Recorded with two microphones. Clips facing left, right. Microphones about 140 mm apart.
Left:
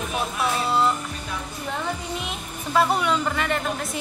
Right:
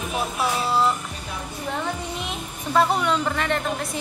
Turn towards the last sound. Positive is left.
turn(degrees=0)  # may be behind; listen again after turning